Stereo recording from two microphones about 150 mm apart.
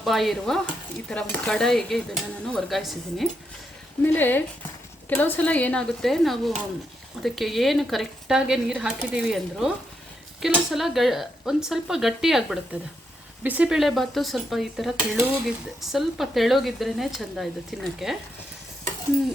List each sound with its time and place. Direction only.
0.0 s speech: centre (ahead or behind)
4.0 s speech: 15° left (ahead or behind)